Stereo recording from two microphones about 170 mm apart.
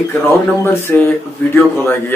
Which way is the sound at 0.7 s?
15° left (ahead or behind).